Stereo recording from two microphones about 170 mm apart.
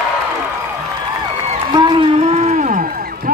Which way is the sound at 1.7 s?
25° right (ahead or behind).